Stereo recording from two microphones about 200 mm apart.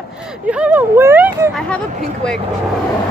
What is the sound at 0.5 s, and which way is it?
Speech, 5° right (ahead or behind).